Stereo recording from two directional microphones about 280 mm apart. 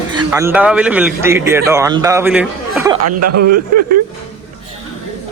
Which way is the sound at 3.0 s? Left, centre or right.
Right.